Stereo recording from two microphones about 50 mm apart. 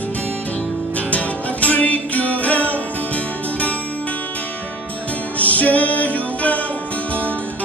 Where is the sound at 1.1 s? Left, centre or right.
Left.